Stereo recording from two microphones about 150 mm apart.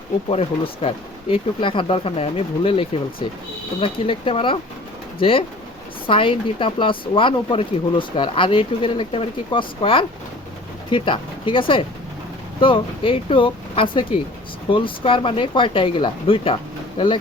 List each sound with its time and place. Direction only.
0.3 s speech: 40° left (ahead or behind)